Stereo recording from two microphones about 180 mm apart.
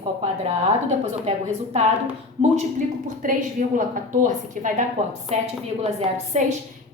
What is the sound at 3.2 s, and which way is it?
A woman's voice, 50° right (ahead or behind).